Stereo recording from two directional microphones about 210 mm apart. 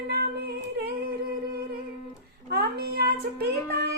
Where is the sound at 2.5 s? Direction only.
50° right (ahead or behind).